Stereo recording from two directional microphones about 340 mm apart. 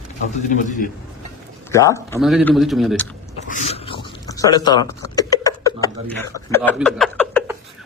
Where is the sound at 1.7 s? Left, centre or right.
Centre.